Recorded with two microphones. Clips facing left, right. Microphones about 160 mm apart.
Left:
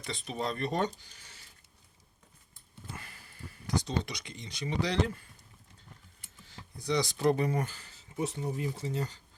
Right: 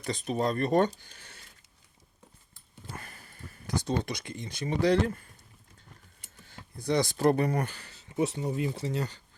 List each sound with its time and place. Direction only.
0.0 s speech: 45° right (ahead or behind)
2.9 s speech: 50° right (ahead or behind)
6.4 s speech: 55° right (ahead or behind); by 9.2 s 70° right (ahead or behind)